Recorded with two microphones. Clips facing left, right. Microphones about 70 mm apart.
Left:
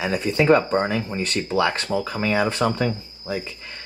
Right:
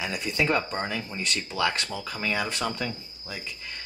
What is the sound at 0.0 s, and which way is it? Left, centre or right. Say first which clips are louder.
Speech: left 7 dB; left.